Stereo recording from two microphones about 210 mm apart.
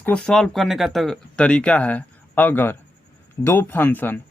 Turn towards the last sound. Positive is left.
turn(degrees=10)  # may be behind; listen again after turning